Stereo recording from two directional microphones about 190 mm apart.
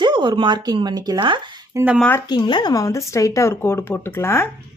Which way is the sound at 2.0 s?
10° left (ahead or behind).